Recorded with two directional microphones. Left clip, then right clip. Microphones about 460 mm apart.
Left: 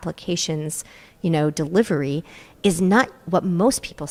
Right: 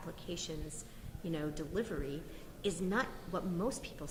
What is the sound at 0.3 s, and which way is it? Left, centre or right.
A woman's voice, left.